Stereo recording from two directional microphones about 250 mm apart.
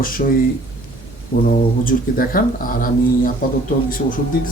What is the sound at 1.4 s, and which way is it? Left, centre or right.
Speech, left.